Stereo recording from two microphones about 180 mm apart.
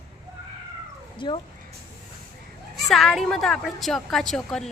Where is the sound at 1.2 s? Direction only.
25° left (ahead or behind).